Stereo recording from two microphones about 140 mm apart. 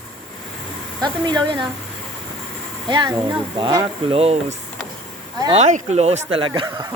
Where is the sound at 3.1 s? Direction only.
15° right (ahead or behind).